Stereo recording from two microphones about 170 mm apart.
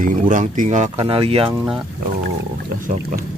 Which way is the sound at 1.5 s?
10° right (ahead or behind).